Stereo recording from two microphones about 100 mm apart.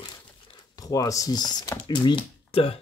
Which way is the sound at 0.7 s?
35° left (ahead or behind).